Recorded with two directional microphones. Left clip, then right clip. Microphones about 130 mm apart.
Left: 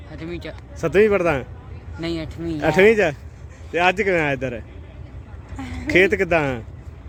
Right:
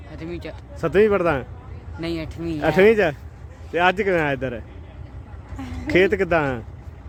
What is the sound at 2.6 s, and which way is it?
Speech, centre (ahead or behind).